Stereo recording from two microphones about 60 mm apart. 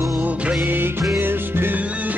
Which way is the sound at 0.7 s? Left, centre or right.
Right.